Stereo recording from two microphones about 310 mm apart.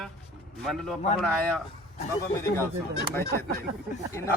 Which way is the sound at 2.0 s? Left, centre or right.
Centre.